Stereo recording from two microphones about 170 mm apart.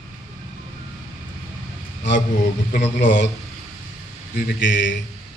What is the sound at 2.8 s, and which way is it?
Speech, 90° left.